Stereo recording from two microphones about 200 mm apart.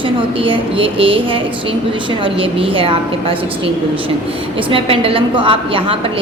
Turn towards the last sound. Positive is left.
turn(degrees=-25)  # may be behind; listen again after turning